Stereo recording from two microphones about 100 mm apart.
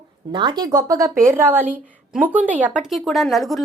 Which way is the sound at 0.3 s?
50° right (ahead or behind).